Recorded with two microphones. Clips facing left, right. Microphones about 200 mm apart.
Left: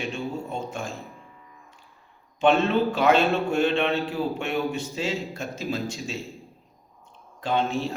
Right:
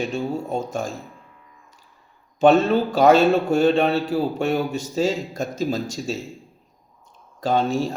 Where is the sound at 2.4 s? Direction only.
40° right (ahead or behind).